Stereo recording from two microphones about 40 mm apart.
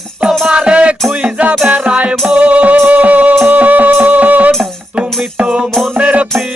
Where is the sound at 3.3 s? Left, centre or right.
Right.